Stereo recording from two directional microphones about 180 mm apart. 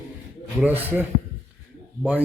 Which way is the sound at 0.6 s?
10° right (ahead or behind).